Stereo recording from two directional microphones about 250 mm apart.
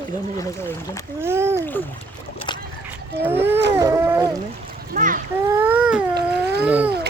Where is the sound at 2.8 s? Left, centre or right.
Centre.